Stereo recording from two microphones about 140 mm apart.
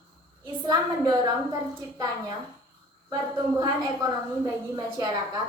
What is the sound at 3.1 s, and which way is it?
Speech, 30° right (ahead or behind).